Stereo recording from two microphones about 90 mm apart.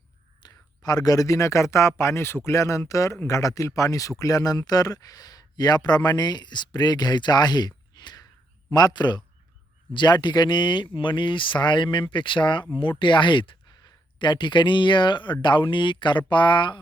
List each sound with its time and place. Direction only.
0.4 s a man's voice: 45° left (ahead or behind)